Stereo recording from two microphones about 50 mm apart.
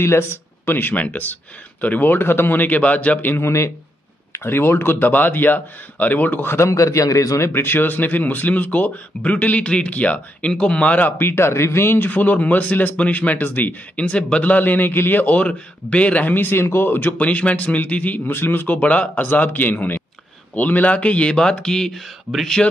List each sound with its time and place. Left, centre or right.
0.0 s speech: left
2.8 s speech: left
3.4 s a man's voice: left
4.3 s speech: left
6.4 s a man's voice: left
7.5 s a man's voice: left
12.1 s speech: left
13.9 s speech: left
15.3 s speech: left
17.2 s a man's voice: left
18.3 s speech: left
18.8 s a man's voice: left; by 22.7 s centre